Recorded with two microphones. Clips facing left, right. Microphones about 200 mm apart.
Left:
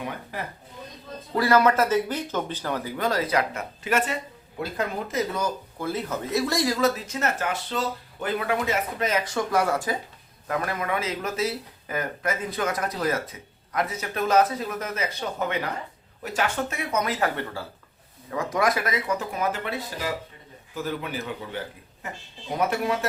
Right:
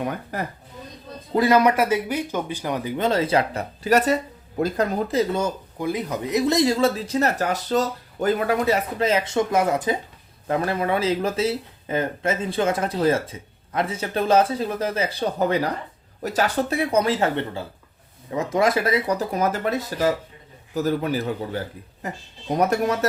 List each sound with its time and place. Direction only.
0.0 s speech: 45° right (ahead or behind)
1.3 s speech: 20° right (ahead or behind)
5.8 s speech: 15° right (ahead or behind); by 23.0 s 40° right (ahead or behind)